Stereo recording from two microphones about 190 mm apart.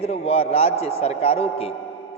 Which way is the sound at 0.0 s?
30° left (ahead or behind).